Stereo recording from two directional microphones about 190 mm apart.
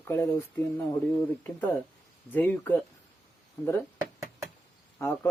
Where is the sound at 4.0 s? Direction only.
15° right (ahead or behind).